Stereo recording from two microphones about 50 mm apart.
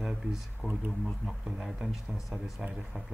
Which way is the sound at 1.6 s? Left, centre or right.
Centre.